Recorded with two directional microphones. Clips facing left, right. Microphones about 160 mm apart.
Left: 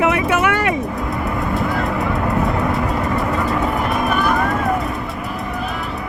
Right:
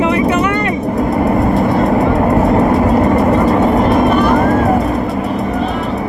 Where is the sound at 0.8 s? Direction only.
45° right (ahead or behind).